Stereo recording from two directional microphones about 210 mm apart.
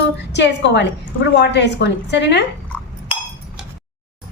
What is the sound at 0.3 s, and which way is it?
A woman's voice, 55° left (ahead or behind).